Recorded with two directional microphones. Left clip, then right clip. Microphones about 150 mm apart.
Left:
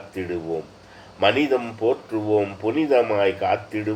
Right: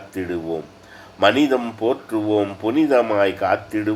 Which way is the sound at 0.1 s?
35° right (ahead or behind).